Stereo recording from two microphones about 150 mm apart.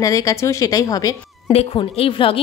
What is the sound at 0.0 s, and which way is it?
A woman's voice, 20° left (ahead or behind).